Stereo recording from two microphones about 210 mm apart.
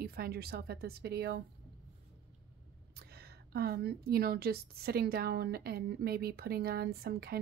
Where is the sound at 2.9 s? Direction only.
50° right (ahead or behind).